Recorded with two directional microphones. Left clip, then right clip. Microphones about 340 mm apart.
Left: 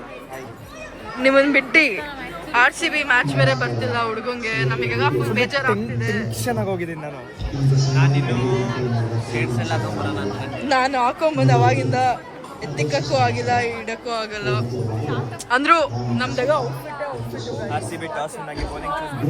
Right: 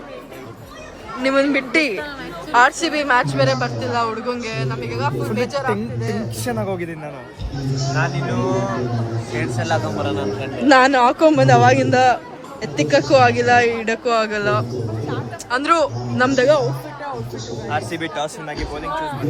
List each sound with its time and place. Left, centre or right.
1.2 s a man's voice: centre
7.9 s a man's voice: right
15.4 s a man's voice: centre
16.2 s a man's voice: right
17.7 s a man's voice: right